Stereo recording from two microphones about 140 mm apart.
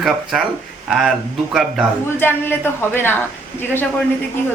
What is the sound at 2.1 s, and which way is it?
Speech, 15° left (ahead or behind).